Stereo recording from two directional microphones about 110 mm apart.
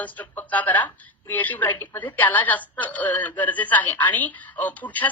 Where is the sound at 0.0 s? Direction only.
15° left (ahead or behind).